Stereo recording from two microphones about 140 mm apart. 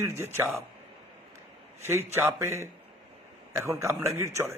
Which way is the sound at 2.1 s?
15° right (ahead or behind).